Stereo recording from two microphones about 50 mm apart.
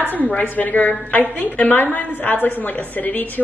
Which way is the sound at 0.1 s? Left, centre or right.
Left.